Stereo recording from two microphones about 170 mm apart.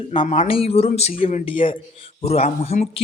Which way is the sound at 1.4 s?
30° left (ahead or behind).